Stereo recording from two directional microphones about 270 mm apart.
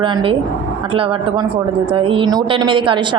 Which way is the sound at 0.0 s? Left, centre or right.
Centre.